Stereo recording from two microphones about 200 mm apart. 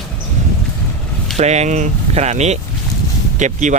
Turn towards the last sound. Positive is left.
turn(degrees=-40)  # may be behind; listen again after turning